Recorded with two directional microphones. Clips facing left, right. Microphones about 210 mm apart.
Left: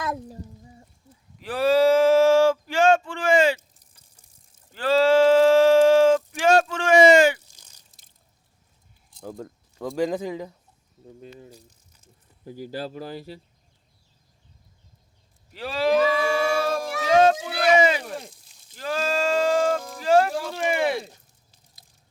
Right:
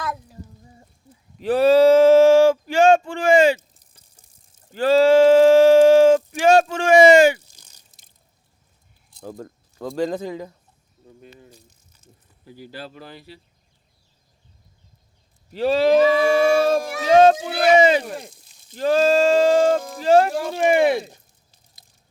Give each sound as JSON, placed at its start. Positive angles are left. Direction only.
{"t": 1.4, "sound": "speech", "side_deg": -20}
{"t": 4.7, "sound": "a sound", "side_deg": -15}
{"t": 9.7, "sound": "speech", "side_deg": 15}
{"t": 12.5, "sound": "speech", "side_deg": 40}
{"t": 15.5, "sound": "speech", "side_deg": -25}
{"t": 18.0, "sound": "speech", "side_deg": -5}
{"t": 18.8, "sound": "speech", "side_deg": -25}